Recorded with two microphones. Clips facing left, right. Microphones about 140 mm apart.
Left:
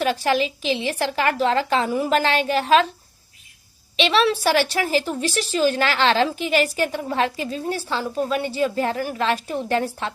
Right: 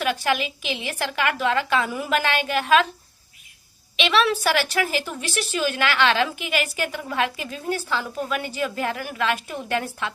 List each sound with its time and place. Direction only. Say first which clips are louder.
0.0 s a woman's voice: left 3 dB; 30° left (ahead or behind)
3.9 s a woman's voice: left 2 dB; 35° left (ahead or behind)